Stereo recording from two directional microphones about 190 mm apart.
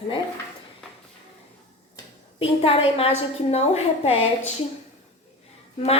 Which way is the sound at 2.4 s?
30° left (ahead or behind).